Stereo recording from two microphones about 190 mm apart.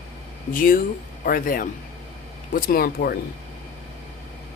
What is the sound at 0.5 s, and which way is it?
Speech, 45° left (ahead or behind).